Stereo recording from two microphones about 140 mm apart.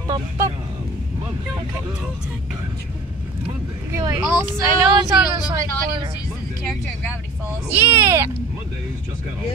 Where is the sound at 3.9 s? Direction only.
25° right (ahead or behind).